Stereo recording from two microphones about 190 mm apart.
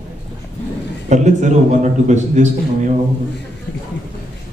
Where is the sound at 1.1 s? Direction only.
40° right (ahead or behind).